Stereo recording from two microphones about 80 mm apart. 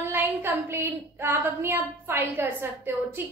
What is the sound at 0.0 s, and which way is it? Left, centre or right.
Speech, right.